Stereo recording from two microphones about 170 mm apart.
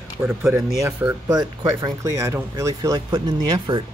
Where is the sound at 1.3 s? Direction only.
25° right (ahead or behind).